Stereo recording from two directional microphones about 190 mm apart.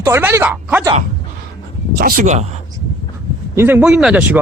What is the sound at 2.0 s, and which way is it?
Speech, 50° right (ahead or behind).